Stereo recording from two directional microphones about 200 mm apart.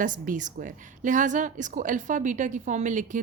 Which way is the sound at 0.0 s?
40° right (ahead or behind).